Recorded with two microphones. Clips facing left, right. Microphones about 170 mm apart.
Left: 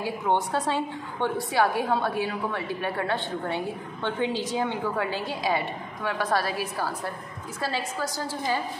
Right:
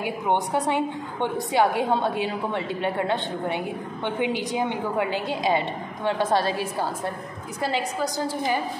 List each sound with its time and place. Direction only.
0.0 s a woman's voice: 15° right (ahead or behind)